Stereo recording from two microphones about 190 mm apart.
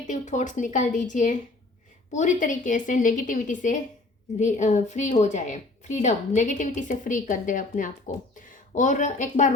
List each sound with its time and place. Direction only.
0.1 s a woman's voice: 40° left (ahead or behind)